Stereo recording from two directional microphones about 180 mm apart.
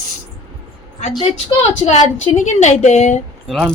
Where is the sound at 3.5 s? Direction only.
Centre (ahead or behind).